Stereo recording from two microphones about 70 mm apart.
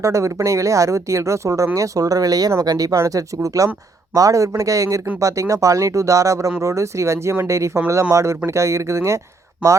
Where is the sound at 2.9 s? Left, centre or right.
Right.